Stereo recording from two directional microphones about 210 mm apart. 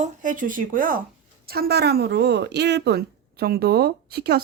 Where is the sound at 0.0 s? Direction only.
40° right (ahead or behind).